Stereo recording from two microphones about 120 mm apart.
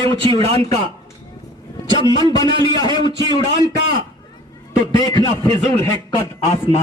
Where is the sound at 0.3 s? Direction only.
55° right (ahead or behind).